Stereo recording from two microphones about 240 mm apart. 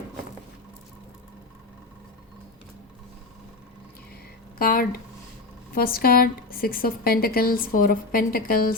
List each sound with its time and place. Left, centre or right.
4.5 s speech: left